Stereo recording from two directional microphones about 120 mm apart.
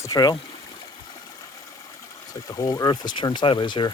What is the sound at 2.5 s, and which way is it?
Speech, 30° left (ahead or behind).